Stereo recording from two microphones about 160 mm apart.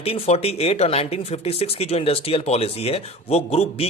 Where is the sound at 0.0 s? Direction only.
40° left (ahead or behind).